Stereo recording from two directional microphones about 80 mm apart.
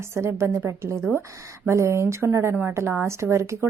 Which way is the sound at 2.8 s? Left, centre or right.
Right.